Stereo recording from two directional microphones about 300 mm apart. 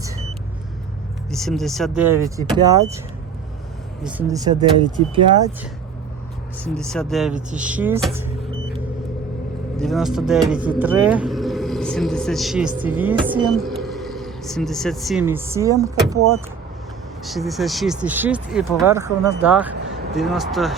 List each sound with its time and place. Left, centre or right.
1.3 s speech: centre
4.0 s speech: centre
6.7 s speech: centre
9.7 s speech: centre
13.1 s speech: centre
13.7 s speech: centre
17.2 s speech: centre